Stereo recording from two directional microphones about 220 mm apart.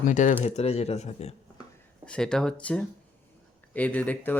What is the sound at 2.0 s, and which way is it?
Speech, 5° left (ahead or behind).